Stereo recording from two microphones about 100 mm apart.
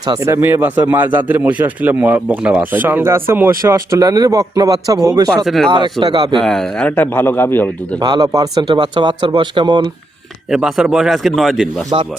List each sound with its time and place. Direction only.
0.2 s speech: 25° right (ahead or behind)
5.5 s a man's voice: centre (ahead or behind)
5.7 s speech: 45° right (ahead or behind)
6.3 s a man's voice: 5° left (ahead or behind)
6.8 s a man's voice: 20° left (ahead or behind)
7.9 s speech: 45° right (ahead or behind)
8.7 s speech: 55° right (ahead or behind)
10.5 s a man's voice: 5° right (ahead or behind)
11.9 s speech: 65° right (ahead or behind)